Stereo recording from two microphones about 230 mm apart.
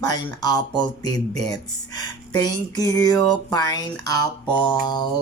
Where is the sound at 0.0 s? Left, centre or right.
Centre.